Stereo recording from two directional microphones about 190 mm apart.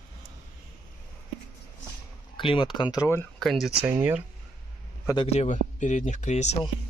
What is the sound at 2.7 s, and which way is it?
Speech, 20° left (ahead or behind).